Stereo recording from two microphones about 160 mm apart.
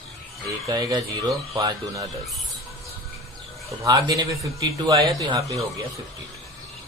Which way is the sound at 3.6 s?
20° right (ahead or behind).